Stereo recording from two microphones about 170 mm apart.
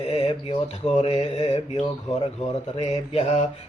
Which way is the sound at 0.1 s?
35° left (ahead or behind).